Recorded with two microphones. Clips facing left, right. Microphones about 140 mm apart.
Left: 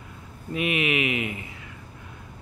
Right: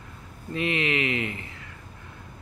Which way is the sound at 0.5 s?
15° left (ahead or behind).